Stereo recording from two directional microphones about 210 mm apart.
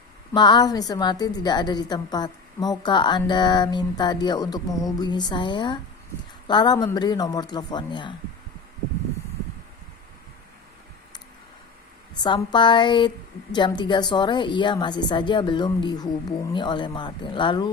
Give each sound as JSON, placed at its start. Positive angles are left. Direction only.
{"t": 0.3, "sound": "a woman's voice", "side_deg": 20}
{"t": 12.2, "sound": "a woman's voice", "side_deg": 20}